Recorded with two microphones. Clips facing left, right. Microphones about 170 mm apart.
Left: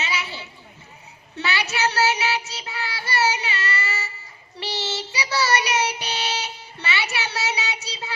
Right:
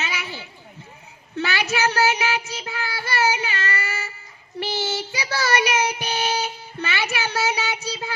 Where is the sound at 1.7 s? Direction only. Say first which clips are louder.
Right 1 dB; 50° right (ahead or behind).